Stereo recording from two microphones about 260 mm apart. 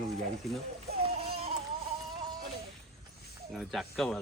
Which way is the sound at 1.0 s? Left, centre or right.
Right.